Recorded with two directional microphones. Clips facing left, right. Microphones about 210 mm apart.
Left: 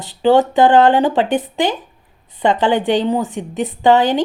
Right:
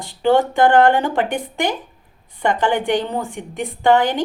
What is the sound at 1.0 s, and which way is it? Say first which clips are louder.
A woman's voice: left 5 dB; 20° left (ahead or behind).